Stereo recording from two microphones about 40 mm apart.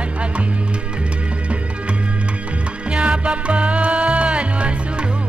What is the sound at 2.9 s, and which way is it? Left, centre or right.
Music, right.